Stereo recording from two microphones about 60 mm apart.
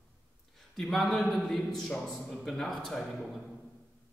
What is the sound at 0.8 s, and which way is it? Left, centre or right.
A man's voice, centre.